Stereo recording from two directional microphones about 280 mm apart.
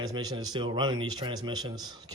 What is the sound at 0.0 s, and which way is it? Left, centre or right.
Speech, centre.